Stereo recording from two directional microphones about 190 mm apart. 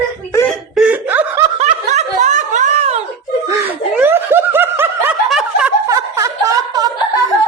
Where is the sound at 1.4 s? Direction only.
35° right (ahead or behind).